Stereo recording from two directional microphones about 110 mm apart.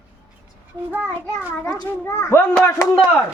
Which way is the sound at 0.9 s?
10° right (ahead or behind).